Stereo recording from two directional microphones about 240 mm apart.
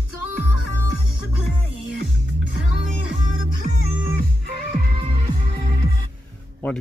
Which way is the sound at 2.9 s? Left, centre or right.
Right.